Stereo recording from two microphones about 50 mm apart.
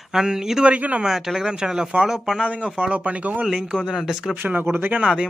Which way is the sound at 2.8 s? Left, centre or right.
Right.